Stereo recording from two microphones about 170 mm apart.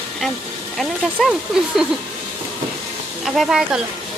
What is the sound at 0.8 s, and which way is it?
Speech, centre (ahead or behind).